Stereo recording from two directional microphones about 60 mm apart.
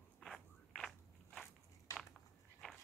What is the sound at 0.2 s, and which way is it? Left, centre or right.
Walk, centre.